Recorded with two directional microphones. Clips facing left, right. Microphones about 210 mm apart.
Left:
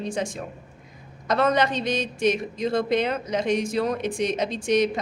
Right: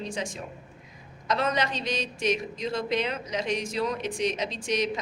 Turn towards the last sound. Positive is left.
turn(degrees=55)  # may be behind; listen again after turning